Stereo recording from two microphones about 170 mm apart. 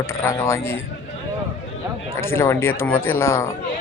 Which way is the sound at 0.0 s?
15° left (ahead or behind).